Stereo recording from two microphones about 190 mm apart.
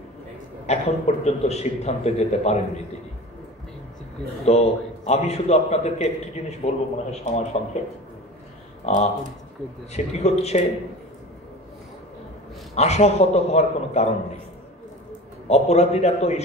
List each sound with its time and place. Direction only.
0.7 s a man's voice: 35° left (ahead or behind)
4.5 s a man's voice: 35° left (ahead or behind)
8.8 s a man's voice: 35° left (ahead or behind)
12.7 s a man's voice: 35° left (ahead or behind)
15.4 s a man's voice: 35° left (ahead or behind)